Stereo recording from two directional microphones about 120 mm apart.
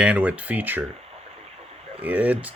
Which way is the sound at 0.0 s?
10° right (ahead or behind).